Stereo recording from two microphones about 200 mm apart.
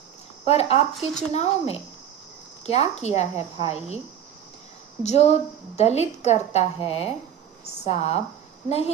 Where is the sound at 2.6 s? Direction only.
30° left (ahead or behind).